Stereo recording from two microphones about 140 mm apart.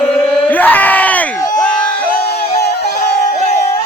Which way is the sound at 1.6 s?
10° left (ahead or behind).